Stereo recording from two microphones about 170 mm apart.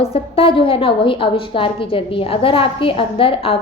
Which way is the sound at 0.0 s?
35° left (ahead or behind).